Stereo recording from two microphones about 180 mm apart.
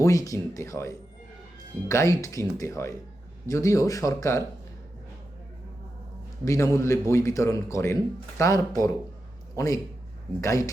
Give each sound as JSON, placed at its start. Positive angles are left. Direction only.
{"t": 0.0, "sound": "a man's voice", "side_deg": 20}
{"t": 6.4, "sound": "a man's voice", "side_deg": 15}